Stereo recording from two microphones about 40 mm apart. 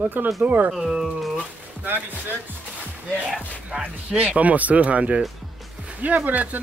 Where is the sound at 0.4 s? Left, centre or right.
Right.